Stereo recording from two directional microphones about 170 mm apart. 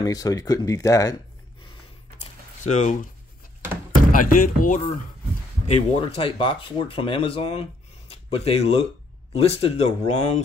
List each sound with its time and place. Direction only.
0.0 s speech: 20° left (ahead or behind)
2.6 s speech: 45° left (ahead or behind)
4.1 s speech: 55° left (ahead or behind)
5.7 s speech: 35° left (ahead or behind)